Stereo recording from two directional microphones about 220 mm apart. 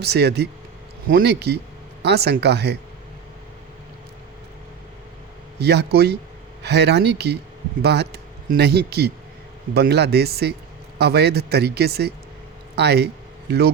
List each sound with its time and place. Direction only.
0.0 s speech: 50° right (ahead or behind)
5.5 s speech: 50° right (ahead or behind)